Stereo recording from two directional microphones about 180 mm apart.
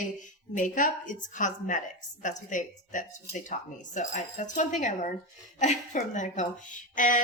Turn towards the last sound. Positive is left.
turn(degrees=45)  # may be behind; listen again after turning